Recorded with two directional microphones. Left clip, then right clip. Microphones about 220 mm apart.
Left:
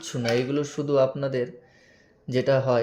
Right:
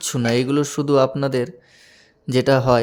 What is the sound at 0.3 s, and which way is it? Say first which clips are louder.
Speech: right 5 dB; 35° right (ahead or behind).